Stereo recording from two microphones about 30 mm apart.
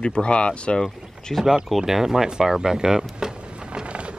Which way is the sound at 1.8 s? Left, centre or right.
Centre.